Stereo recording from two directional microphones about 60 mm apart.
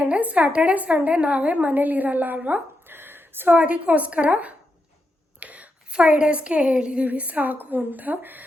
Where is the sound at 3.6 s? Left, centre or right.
Right.